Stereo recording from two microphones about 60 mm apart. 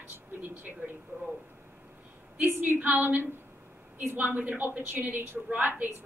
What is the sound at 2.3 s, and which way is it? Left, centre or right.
A woman's voice, right.